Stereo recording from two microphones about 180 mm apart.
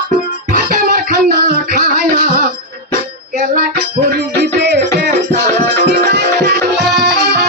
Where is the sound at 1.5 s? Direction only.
55° right (ahead or behind).